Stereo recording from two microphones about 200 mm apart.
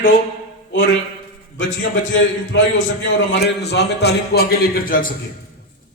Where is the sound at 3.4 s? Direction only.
55° left (ahead or behind).